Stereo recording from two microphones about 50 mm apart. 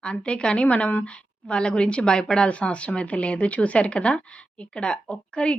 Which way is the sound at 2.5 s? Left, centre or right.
Left.